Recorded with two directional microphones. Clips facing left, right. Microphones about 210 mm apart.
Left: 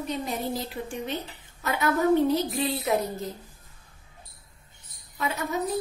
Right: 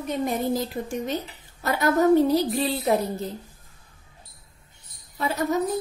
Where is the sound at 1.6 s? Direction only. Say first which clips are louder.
Right 4 dB; 40° right (ahead or behind).